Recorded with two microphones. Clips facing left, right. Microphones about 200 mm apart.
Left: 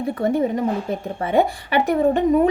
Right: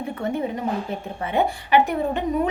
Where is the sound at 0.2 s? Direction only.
40° left (ahead or behind).